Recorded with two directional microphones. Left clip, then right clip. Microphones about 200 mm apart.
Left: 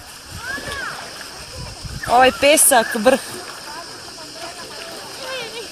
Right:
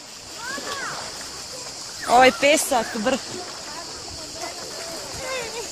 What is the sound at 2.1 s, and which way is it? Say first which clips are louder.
Speech: left 2 dB; 10° right (ahead or behind).